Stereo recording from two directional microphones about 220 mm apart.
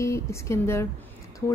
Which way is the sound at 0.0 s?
15° left (ahead or behind).